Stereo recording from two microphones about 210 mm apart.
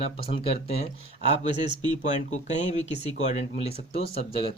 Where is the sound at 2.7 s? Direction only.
30° left (ahead or behind).